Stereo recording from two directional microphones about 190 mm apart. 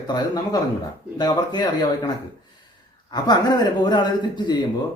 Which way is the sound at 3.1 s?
20° left (ahead or behind).